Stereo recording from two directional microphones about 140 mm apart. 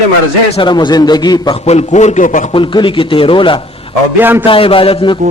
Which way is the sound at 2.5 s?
35° left (ahead or behind).